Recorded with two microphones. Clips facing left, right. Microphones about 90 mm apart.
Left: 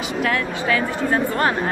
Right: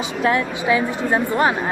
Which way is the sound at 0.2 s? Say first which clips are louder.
Right 3 dB; 20° right (ahead or behind).